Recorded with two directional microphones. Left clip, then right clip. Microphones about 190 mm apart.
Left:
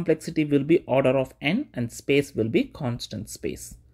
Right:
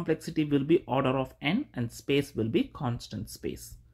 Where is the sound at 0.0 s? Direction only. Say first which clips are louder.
Left 6 dB; 15° left (ahead or behind).